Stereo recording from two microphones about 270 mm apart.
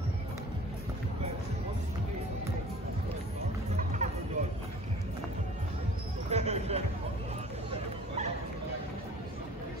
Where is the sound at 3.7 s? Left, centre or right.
Right.